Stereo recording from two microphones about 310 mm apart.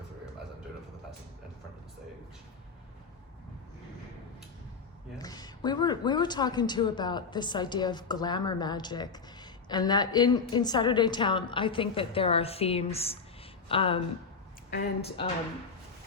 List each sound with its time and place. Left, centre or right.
5.1 s a woman's voice: centre
14.7 s a woman's voice: left